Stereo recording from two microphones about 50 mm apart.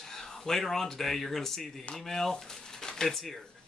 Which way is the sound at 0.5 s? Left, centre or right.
Centre.